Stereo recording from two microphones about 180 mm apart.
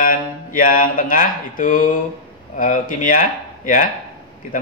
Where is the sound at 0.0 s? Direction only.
50° left (ahead or behind).